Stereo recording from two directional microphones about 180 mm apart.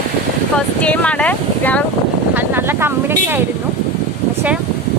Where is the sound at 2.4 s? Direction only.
10° right (ahead or behind).